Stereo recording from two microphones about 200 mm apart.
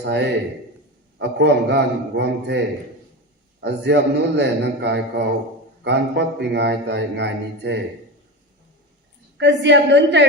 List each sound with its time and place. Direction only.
0.0 s a man's voice: 60° right (ahead or behind)
9.4 s a man's voice: 60° right (ahead or behind)